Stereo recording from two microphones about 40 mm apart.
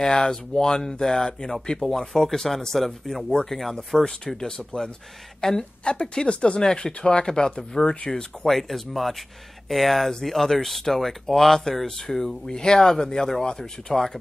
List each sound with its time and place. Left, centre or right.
0.0 s speech: centre
5.9 s speech: left
8.1 s speech: centre
8.5 s speech: centre